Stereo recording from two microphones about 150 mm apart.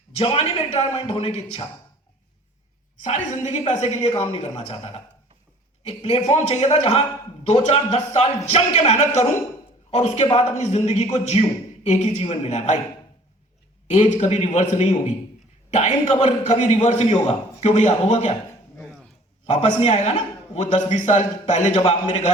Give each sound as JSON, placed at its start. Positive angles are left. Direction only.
{"t": 0.1, "sound": "a man's voice", "side_deg": 40}
{"t": 3.0, "sound": "a man's voice", "side_deg": 50}
{"t": 13.8, "sound": "a man's voice", "side_deg": 50}
{"t": 19.5, "sound": "a man's voice", "side_deg": 50}